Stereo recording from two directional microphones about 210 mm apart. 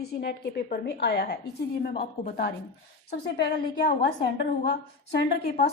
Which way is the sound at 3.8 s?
55° left (ahead or behind).